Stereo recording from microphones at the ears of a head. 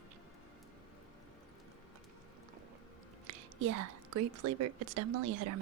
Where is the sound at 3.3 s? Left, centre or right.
Right.